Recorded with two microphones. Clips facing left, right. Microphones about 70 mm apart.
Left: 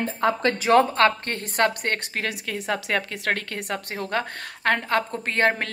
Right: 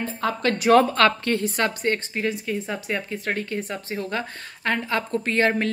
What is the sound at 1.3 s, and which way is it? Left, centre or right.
A woman's voice, left.